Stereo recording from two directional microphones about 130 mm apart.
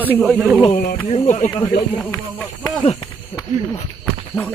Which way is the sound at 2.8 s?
40° left (ahead or behind).